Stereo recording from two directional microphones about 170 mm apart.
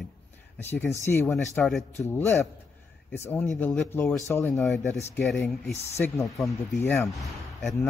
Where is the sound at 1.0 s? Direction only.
15° left (ahead or behind).